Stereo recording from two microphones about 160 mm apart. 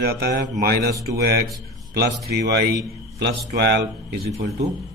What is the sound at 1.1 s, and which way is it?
Speech, 75° right (ahead or behind).